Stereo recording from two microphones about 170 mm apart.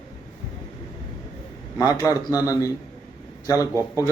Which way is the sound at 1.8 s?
20° left (ahead or behind).